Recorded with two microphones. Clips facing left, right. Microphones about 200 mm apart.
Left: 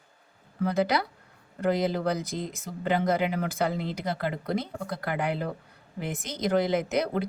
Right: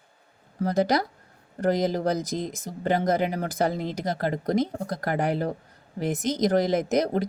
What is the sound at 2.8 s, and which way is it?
Speech, 40° right (ahead or behind).